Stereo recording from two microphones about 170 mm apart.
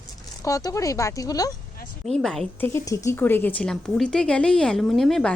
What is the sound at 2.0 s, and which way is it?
Speech, centre (ahead or behind).